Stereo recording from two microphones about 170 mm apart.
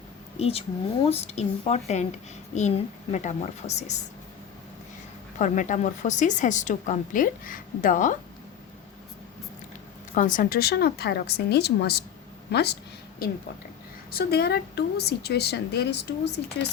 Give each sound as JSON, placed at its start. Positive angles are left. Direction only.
{"t": 0.3, "sound": "a woman's voice", "side_deg": 35}
{"t": 5.4, "sound": "speech", "side_deg": 45}
{"t": 10.2, "sound": "a woman's voice", "side_deg": 50}
{"t": 13.2, "sound": "a woman's voice", "side_deg": 60}